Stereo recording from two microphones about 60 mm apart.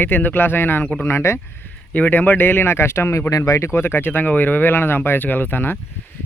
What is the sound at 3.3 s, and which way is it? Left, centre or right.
Speech, left.